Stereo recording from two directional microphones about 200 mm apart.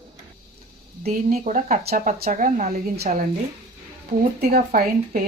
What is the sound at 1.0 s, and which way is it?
Speech, 40° right (ahead or behind).